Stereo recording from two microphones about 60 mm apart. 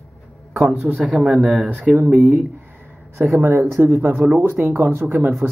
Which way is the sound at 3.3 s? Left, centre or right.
Right.